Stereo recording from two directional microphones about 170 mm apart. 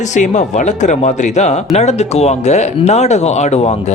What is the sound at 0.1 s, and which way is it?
Speech, 45° left (ahead or behind).